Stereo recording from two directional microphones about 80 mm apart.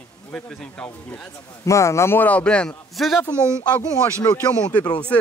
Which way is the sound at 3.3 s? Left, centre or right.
Right.